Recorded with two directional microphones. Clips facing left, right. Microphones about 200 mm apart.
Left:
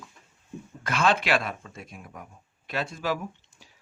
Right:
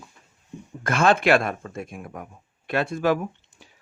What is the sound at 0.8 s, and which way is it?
Speech, 50° right (ahead or behind).